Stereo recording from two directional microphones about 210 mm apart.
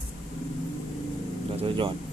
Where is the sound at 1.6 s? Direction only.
25° right (ahead or behind).